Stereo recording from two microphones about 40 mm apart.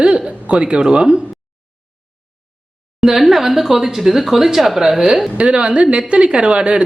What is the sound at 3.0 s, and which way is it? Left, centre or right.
Speech, centre.